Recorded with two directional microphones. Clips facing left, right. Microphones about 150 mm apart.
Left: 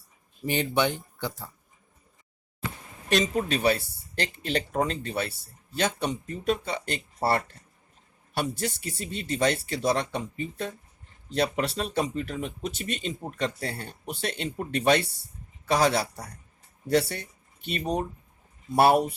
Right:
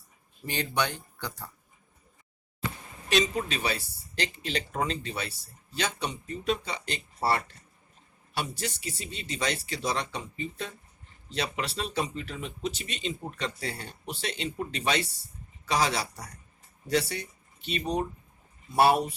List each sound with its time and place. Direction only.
0.4 s speech: 20° left (ahead or behind)
3.1 s speech: 50° left (ahead or behind)